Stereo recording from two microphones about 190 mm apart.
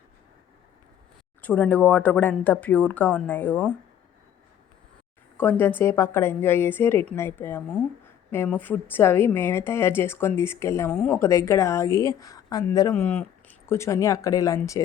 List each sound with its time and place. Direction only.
1.4 s a woman's voice: 10° left (ahead or behind)
5.4 s a woman's voice: 10° left (ahead or behind)